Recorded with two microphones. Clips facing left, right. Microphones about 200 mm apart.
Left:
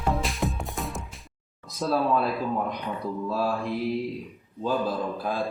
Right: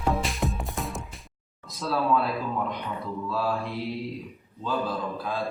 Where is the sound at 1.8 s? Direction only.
45° left (ahead or behind).